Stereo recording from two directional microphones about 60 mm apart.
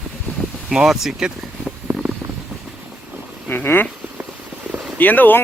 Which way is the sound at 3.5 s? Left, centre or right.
Left.